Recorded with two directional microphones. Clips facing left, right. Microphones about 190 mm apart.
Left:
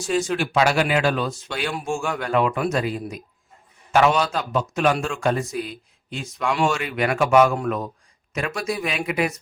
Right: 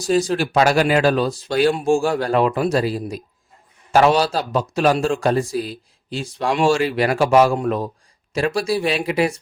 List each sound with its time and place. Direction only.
0.0 s a man's voice: 35° right (ahead or behind)